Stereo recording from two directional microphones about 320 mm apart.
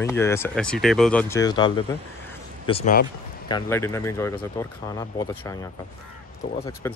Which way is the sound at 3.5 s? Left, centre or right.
Centre.